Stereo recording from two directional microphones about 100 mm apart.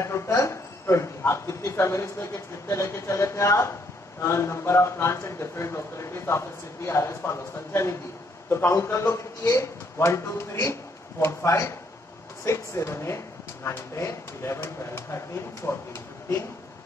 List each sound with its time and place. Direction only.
0.0 s a man's voice: 30° left (ahead or behind)